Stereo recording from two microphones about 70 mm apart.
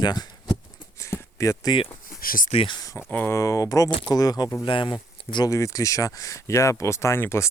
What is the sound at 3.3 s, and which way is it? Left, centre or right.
Speech, left.